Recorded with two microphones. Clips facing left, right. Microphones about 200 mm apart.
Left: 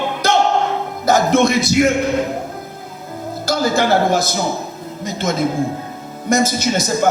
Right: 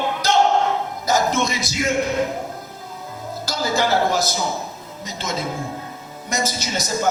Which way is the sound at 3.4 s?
55° left (ahead or behind).